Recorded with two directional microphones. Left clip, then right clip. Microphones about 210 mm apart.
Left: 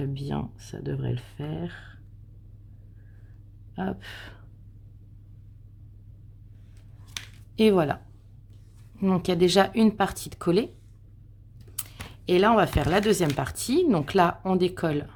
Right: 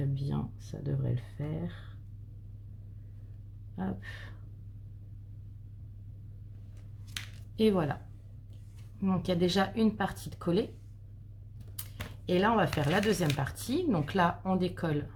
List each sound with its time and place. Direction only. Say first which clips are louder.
0.1 s speech: left 5 dB; 40° left (ahead or behind)
3.8 s speech: left 7 dB; 40° left (ahead or behind)
7.5 s speech: left 7 dB; 40° left (ahead or behind)
9.0 s speech: left 8 dB; 40° left (ahead or behind)
11.8 s speech: left 4 dB; 40° left (ahead or behind)